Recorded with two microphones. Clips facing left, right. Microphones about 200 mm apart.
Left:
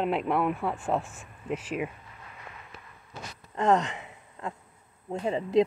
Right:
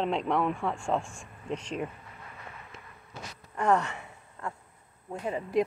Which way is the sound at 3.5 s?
20° left (ahead or behind).